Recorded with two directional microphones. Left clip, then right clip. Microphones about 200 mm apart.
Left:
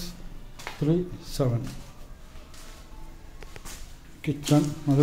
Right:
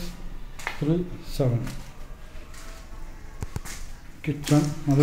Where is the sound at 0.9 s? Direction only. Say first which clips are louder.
Left 1 dB; 30° left (ahead or behind).